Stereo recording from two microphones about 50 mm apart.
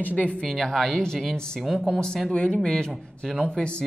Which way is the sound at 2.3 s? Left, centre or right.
Left.